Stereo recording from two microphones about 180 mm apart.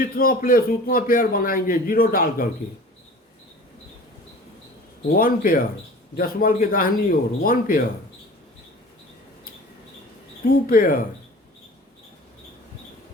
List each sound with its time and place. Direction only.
0.0 s a man's voice: 55° left (ahead or behind)
5.0 s a man's voice: 55° left (ahead or behind)
10.7 s a man's voice: 50° left (ahead or behind)